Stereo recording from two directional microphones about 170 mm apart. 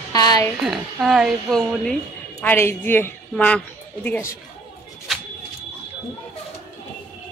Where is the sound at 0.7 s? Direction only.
Centre (ahead or behind).